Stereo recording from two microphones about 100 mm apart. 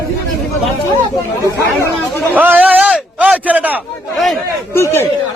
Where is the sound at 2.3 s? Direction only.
15° right (ahead or behind).